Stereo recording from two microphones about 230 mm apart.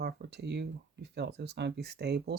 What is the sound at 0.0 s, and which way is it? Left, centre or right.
Speech, right.